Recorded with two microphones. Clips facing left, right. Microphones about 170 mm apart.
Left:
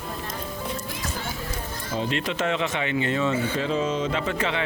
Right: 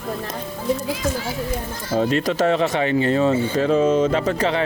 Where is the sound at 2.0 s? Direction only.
40° right (ahead or behind).